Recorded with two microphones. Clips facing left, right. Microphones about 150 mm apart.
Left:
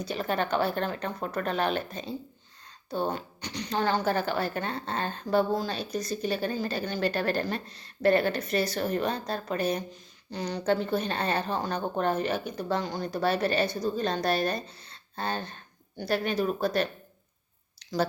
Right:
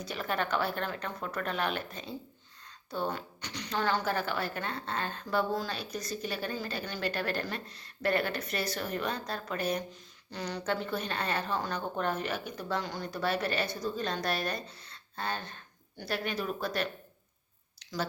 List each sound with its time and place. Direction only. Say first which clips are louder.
0.0 s a woman's voice: left 4 dB; 25° left (ahead or behind)